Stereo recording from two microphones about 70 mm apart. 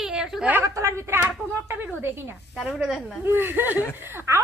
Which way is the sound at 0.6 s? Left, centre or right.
Right.